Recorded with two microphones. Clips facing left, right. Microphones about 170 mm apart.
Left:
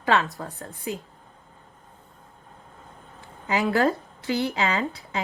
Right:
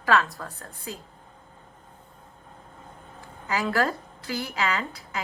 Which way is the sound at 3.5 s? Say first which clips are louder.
Left 4 dB; 20° left (ahead or behind).